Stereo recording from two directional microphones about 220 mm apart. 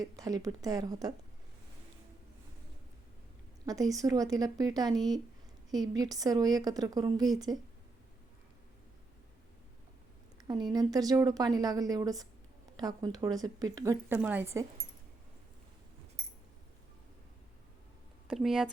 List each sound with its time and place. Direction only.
0.0 s a woman's voice: 15° right (ahead or behind)
3.7 s a woman's voice: 15° right (ahead or behind)
10.4 s a woman's voice: 20° right (ahead or behind)
18.3 s speech: centre (ahead or behind)